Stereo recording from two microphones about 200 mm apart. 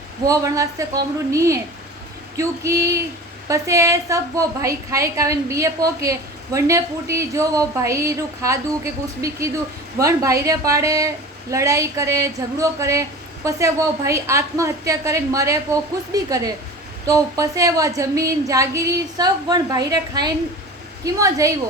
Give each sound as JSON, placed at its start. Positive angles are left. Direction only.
{"t": 0.3, "sound": "a woman's voice", "side_deg": -15}